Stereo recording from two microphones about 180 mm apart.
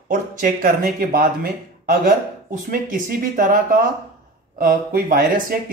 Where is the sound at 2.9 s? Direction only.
50° right (ahead or behind).